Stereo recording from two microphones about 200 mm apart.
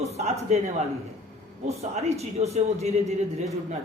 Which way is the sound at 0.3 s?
35° right (ahead or behind).